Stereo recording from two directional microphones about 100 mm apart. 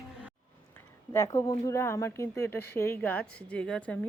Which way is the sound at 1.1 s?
30° left (ahead or behind).